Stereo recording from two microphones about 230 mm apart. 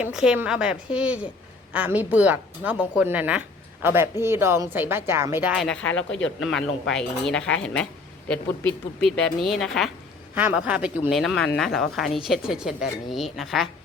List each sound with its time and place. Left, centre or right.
0.0 s a woman's voice: centre
6.0 s speech: left
6.4 s speech: centre